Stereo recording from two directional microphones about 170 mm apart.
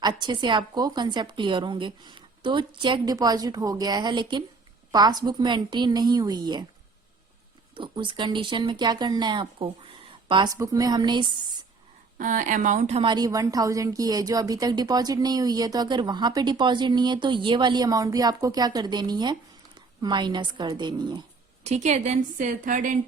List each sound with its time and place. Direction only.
0.0 s a woman's voice: 25° right (ahead or behind)
7.8 s a woman's voice: 30° right (ahead or behind)
12.1 s a woman's voice: 50° right (ahead or behind)
13.0 s a woman's voice: 25° right (ahead or behind)
21.6 s a woman's voice: 40° right (ahead or behind)